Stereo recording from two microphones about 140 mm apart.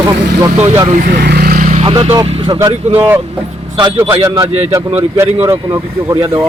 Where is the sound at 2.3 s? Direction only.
40° right (ahead or behind).